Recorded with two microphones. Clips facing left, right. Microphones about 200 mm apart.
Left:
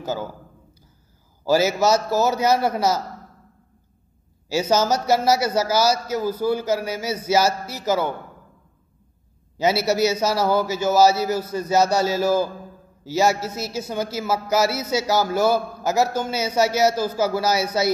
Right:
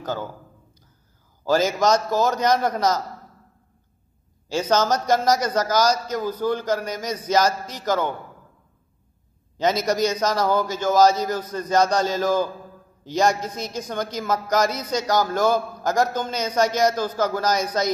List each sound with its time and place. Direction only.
0.0 s a man's voice: 10° left (ahead or behind)
1.4 s a man's voice: 10° left (ahead or behind)
4.5 s a man's voice: 10° left (ahead or behind)
9.6 s a man's voice: 10° left (ahead or behind)